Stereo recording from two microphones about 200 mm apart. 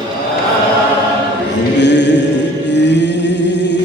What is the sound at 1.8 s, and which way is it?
Chant, 60° left (ahead or behind).